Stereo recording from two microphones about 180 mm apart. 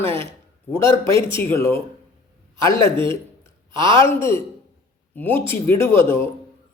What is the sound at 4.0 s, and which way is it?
A man's voice, 15° left (ahead or behind).